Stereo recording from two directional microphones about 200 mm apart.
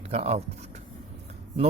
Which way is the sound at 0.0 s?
30° right (ahead or behind).